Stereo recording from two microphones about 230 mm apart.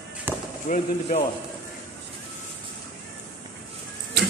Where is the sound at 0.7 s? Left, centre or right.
Left.